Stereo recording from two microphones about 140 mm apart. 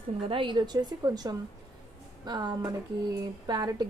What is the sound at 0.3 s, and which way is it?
A woman's voice, 35° right (ahead or behind).